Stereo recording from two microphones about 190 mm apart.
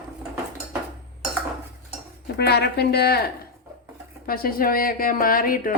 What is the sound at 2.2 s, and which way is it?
A woman's voice, 60° left (ahead or behind).